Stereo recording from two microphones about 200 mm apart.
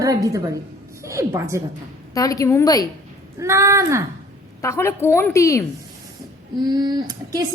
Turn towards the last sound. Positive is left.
turn(degrees=-20)  # may be behind; listen again after turning